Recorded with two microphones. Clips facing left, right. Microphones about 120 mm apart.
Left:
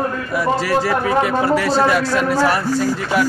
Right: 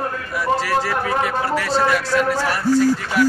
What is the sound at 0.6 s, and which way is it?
A man's voice, 15° left (ahead or behind).